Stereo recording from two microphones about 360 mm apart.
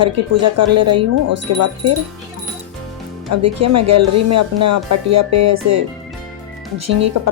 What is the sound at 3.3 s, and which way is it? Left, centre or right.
Speech, right.